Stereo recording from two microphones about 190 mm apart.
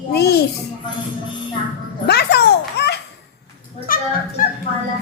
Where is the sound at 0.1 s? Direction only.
60° left (ahead or behind).